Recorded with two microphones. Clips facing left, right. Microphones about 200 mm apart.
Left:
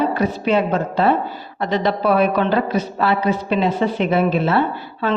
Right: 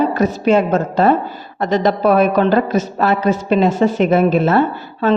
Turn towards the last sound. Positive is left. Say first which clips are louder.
# right 4 dB
turn(degrees=-45)  # may be behind; listen again after turning